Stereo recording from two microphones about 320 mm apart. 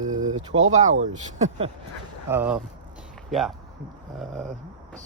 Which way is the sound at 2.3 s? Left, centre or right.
Centre.